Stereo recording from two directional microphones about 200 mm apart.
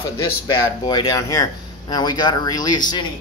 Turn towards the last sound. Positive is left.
turn(degrees=20)  # may be behind; listen again after turning